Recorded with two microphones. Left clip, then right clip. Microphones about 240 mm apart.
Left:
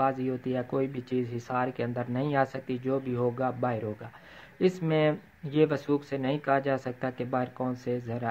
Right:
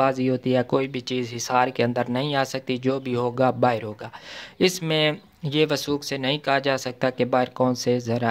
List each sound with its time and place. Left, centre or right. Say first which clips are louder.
0.0 s speech: right 7 dB; right